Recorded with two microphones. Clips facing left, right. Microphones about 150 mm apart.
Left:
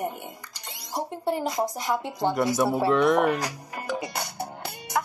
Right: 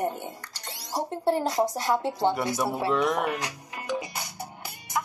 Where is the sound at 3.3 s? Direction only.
35° left (ahead or behind).